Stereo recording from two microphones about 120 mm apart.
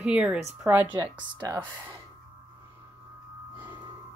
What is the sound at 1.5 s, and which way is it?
Speech, 20° right (ahead or behind).